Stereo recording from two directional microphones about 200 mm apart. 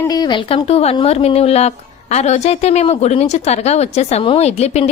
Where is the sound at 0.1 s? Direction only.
20° left (ahead or behind).